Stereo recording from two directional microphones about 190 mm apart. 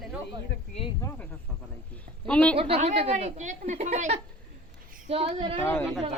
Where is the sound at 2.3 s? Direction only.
5° left (ahead or behind).